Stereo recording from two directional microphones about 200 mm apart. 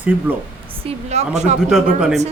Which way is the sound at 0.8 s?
35° right (ahead or behind).